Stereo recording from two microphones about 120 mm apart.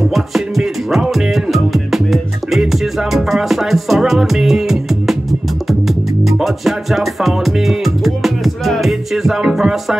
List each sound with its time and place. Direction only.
0.1 s music: centre (ahead or behind)